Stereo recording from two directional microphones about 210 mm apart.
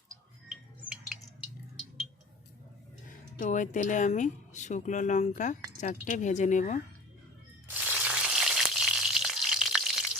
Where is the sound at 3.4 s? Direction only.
35° left (ahead or behind).